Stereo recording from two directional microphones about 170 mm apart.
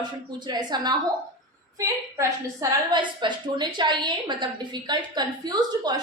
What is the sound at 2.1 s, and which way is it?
A woman's voice, 25° right (ahead or behind).